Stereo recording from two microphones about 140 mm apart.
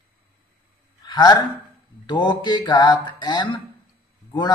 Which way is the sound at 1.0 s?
30° left (ahead or behind).